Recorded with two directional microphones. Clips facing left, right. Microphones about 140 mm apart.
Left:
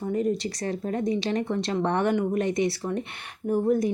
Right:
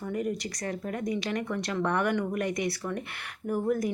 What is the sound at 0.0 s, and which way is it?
Speech, 30° left (ahead or behind).